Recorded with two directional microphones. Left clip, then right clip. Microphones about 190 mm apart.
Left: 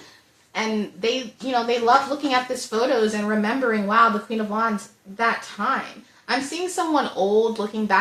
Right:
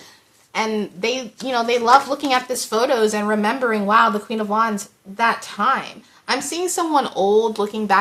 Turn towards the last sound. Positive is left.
turn(degrees=-40)  # may be behind; listen again after turning